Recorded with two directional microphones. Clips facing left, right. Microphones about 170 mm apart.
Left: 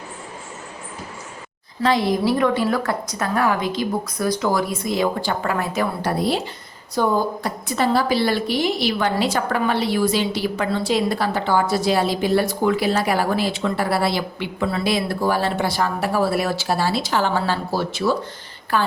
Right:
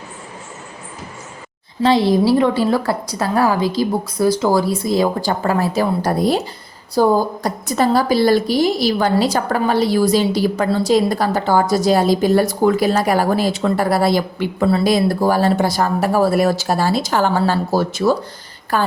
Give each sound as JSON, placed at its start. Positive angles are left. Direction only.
{"t": 1.8, "sound": "a woman's voice", "side_deg": -30}